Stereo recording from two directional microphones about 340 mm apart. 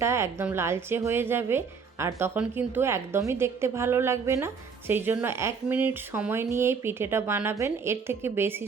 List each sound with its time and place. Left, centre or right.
0.0 s a woman's voice: centre